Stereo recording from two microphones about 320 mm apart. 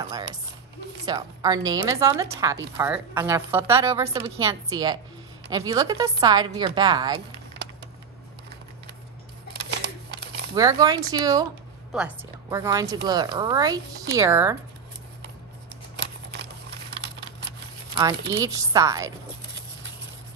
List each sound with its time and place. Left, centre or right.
1.0 s a woman's voice: centre
10.5 s a woman's voice: centre
16.0 s scissors: right
17.9 s a woman's voice: centre